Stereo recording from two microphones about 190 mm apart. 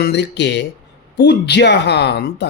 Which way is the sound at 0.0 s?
60° left (ahead or behind).